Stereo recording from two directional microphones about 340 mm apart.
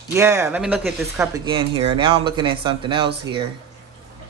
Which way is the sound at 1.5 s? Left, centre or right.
Centre.